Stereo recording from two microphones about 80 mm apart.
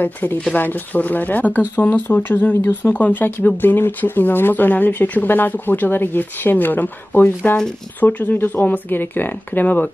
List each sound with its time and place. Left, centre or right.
0.0 s speech: left